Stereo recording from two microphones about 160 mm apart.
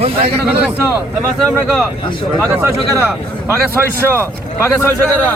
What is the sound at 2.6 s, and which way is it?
A man's voice, 15° right (ahead or behind).